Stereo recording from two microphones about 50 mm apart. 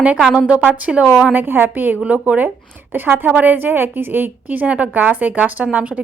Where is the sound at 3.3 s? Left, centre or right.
Right.